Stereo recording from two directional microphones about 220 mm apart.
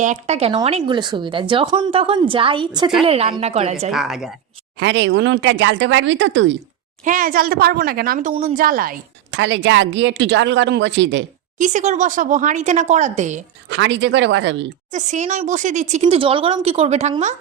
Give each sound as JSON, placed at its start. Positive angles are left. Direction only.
{"t": 0.0, "sound": "speech", "side_deg": -30}
{"t": 3.9, "sound": "a woman's voice", "side_deg": 0}
{"t": 4.8, "sound": "speech", "side_deg": -55}
{"t": 7.0, "sound": "speech", "side_deg": -35}
{"t": 9.3, "sound": "speech", "side_deg": -55}
{"t": 11.5, "sound": "speech", "side_deg": -35}
{"t": 13.7, "sound": "speech", "side_deg": -55}
{"t": 14.9, "sound": "speech", "side_deg": -35}